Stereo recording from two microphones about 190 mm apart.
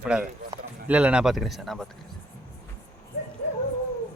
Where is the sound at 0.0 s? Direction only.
5° right (ahead or behind).